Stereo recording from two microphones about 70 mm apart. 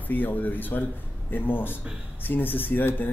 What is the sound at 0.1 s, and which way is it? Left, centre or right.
Speech, left.